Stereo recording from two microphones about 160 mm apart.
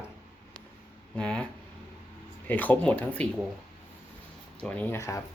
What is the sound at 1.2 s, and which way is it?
Speech, 5° left (ahead or behind).